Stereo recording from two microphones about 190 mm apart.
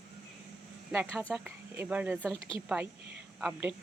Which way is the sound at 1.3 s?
10° right (ahead or behind).